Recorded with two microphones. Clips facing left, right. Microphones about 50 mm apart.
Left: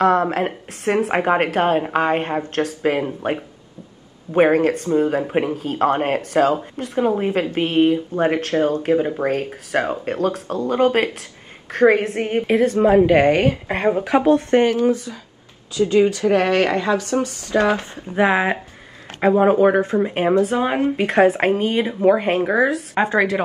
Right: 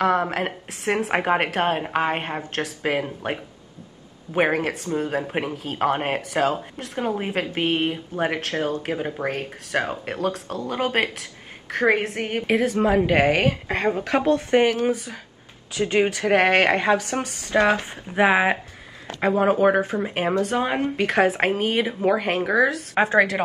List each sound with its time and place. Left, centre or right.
0.0 s a woman's voice: centre
4.3 s a woman's voice: centre
15.7 s speech: right
17.9 s speech: centre
19.2 s a woman's voice: centre
22.0 s a woman's voice: centre